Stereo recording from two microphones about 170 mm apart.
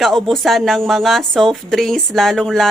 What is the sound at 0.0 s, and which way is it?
Speech, centre (ahead or behind).